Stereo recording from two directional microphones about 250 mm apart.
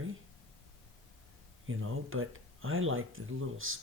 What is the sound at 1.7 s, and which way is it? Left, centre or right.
Speech, right.